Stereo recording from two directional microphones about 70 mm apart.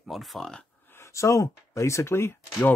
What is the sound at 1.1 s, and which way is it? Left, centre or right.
Speech, left.